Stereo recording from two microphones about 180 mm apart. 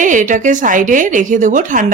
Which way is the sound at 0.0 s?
45° right (ahead or behind).